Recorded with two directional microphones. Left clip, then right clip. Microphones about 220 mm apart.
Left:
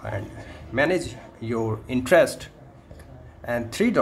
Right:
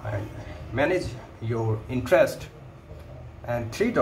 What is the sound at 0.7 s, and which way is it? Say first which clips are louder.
Speech: left 2 dB; 40° left (ahead or behind).